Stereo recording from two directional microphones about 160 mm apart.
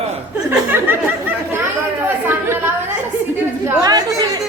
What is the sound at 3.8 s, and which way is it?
Speech, 25° right (ahead or behind).